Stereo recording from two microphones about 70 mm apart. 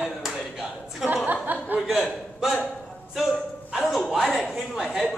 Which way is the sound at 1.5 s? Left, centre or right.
Right.